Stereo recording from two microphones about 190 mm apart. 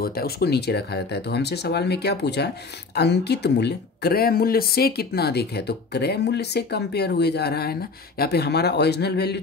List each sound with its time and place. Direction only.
0.0 s speech: 50° left (ahead or behind)